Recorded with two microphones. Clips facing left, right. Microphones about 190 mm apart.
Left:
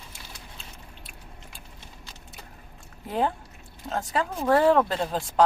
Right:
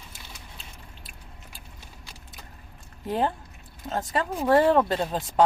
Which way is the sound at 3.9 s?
Centre (ahead or behind).